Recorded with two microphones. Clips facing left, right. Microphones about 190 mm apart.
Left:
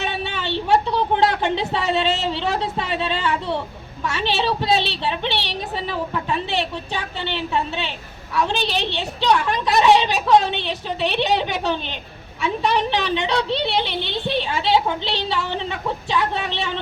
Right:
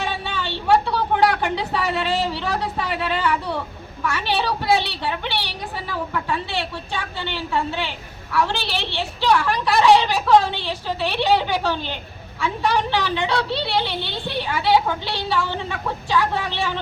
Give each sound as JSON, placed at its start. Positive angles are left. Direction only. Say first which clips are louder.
{"t": 0.0, "sound": "a woman's voice", "louder": "left 1 dB", "side_deg": 20}